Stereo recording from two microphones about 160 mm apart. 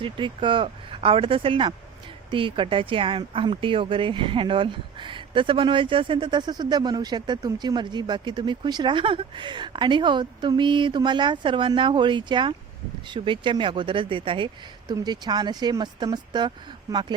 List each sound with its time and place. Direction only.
0.0 s speech: 30° right (ahead or behind)